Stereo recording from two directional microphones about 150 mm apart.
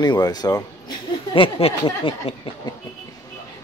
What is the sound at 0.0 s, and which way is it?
Speech, 25° left (ahead or behind).